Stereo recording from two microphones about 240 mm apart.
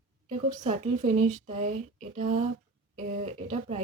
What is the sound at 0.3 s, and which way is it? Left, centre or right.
Speech, right.